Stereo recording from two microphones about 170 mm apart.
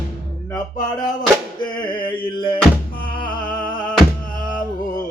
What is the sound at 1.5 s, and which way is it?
Music, 30° left (ahead or behind).